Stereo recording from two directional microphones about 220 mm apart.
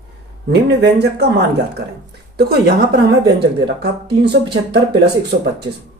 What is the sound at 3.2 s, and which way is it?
Speech, 50° right (ahead or behind).